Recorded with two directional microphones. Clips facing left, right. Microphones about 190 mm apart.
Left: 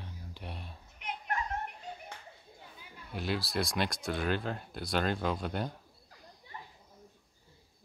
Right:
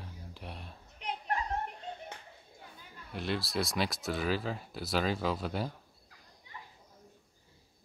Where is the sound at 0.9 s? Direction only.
35° right (ahead or behind).